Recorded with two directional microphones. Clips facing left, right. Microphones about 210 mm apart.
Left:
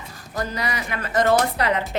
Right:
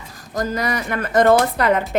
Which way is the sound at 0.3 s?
50° right (ahead or behind).